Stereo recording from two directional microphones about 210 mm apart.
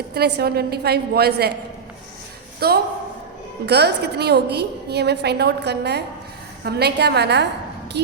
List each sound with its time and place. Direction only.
0.1 s a woman's voice: 50° right (ahead or behind)
2.6 s a woman's voice: 50° right (ahead or behind)